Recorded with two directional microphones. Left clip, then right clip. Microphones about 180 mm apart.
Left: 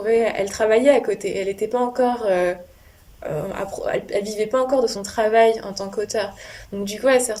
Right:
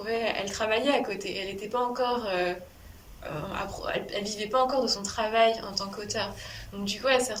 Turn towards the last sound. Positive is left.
turn(degrees=45)  # may be behind; listen again after turning